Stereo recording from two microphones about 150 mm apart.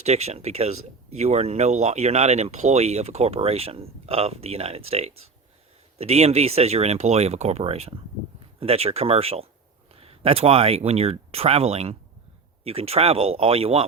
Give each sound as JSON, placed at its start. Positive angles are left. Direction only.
{"t": 0.0, "sound": "speech", "side_deg": -45}